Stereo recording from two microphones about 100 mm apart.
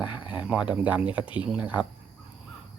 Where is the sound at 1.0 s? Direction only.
55° left (ahead or behind).